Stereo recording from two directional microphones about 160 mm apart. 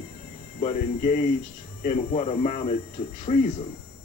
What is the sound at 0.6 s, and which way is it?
Speech, 50° left (ahead or behind).